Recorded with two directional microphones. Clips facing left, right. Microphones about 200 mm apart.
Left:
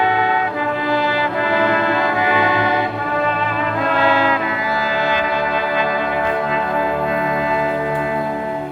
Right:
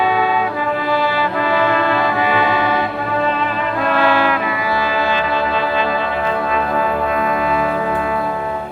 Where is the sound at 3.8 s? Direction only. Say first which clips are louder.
Right 1 dB; 20° left (ahead or behind).